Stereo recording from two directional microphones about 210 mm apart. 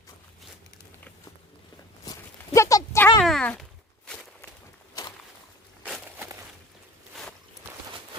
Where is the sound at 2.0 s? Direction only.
15° left (ahead or behind).